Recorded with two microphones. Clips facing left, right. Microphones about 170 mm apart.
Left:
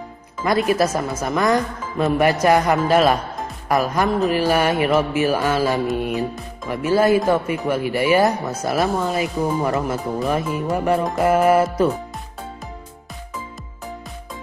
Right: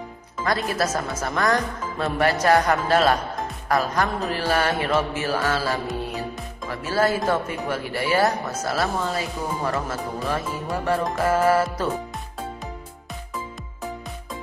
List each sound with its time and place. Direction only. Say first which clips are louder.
0.4 s a man's voice: left 6 dB; 15° left (ahead or behind)